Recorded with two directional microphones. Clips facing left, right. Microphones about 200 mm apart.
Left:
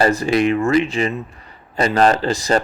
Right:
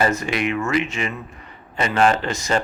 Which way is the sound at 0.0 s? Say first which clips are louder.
Left 5 dB; 35° left (ahead or behind).